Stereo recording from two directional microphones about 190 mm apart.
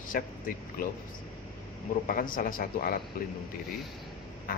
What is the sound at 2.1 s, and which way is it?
Speech, 45° left (ahead or behind).